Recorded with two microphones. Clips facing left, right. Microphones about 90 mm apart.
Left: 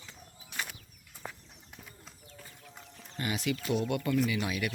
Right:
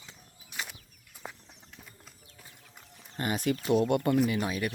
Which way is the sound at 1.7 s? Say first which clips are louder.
Left 3 dB; centre (ahead or behind).